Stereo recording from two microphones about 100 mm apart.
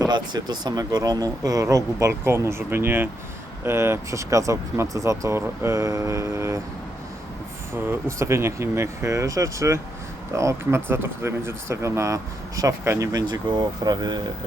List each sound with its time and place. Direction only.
0.0 s speech: 45° right (ahead or behind); by 6.6 s 30° right (ahead or behind)
7.7 s speech: 25° right (ahead or behind); by 14.2 s 45° right (ahead or behind)